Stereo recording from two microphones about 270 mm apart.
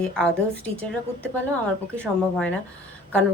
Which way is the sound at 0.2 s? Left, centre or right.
Centre.